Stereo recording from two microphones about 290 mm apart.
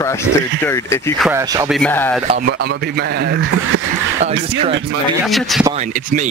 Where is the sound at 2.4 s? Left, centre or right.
Right.